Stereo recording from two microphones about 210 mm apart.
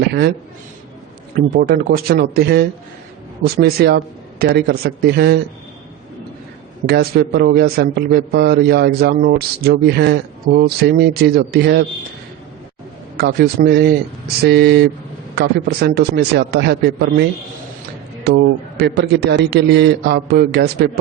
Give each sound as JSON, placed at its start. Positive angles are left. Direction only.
{"t": 0.0, "sound": "a man's voice", "side_deg": -50}
{"t": 1.5, "sound": "a man's voice", "side_deg": -50}
{"t": 6.8, "sound": "a man's voice", "side_deg": -50}
{"t": 13.1, "sound": "a man's voice", "side_deg": -50}